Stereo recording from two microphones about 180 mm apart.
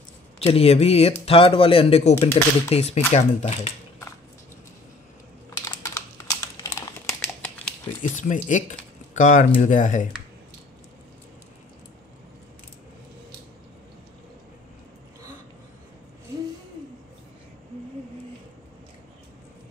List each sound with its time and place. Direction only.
0.5 s speech: 35° left (ahead or behind)
5.7 s crumpling: 15° left (ahead or behind)
8.0 s speech: 45° left (ahead or behind)